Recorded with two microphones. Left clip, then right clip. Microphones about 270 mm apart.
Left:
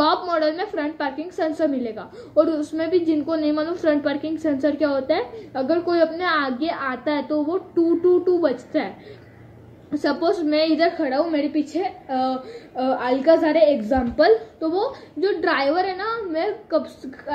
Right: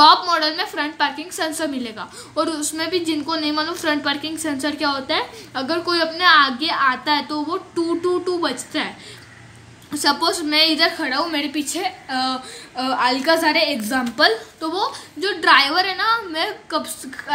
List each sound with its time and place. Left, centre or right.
0.0 s a sound: centre
0.9 s a woman's voice: centre
8.4 s a woman's voice: centre
10.0 s a woman's voice: centre
14.6 s a woman's voice: right
15.1 s a woman's voice: centre